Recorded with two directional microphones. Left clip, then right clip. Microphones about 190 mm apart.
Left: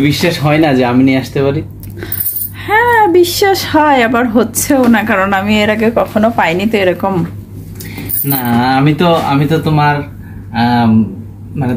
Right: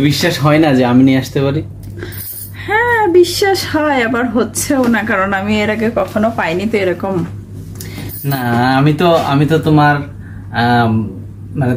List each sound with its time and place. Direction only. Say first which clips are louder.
0.0 s speech: left 1 dB; 15° right (ahead or behind)
2.6 s speech: left 4 dB; centre (ahead or behind)
8.3 s speech: left 1 dB; 25° right (ahead or behind)